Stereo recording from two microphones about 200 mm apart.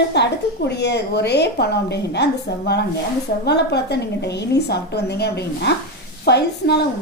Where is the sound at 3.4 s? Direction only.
55° left (ahead or behind).